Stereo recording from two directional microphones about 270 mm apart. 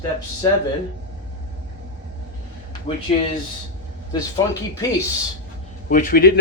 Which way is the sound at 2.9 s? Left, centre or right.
Left.